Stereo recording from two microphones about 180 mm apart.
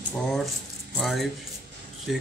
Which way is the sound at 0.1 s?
Centre (ahead or behind).